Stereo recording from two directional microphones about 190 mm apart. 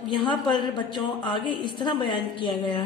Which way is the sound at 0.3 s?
25° left (ahead or behind).